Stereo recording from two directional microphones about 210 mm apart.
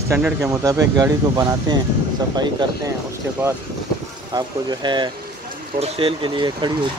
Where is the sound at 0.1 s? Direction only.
15° right (ahead or behind).